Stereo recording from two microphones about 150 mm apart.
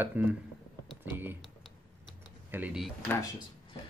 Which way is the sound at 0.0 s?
10° right (ahead or behind).